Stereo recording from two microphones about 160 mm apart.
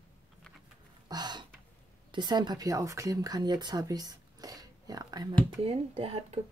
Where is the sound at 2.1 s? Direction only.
30° right (ahead or behind).